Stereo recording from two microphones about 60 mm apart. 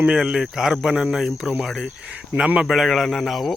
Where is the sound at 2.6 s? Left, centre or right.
Centre.